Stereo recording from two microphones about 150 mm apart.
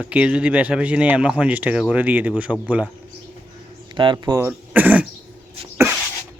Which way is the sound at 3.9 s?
30° right (ahead or behind).